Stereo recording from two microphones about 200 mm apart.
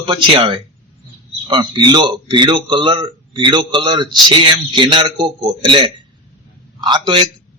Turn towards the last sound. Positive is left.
turn(degrees=-25)  # may be behind; listen again after turning